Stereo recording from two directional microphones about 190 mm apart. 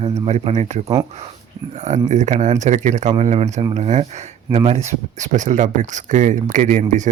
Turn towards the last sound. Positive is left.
turn(degrees=-40)  # may be behind; listen again after turning